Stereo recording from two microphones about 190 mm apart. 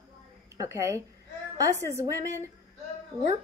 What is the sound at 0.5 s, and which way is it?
A woman's voice, 15° right (ahead or behind).